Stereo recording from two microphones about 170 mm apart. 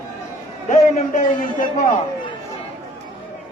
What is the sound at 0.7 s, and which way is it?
Speech, 45° left (ahead or behind).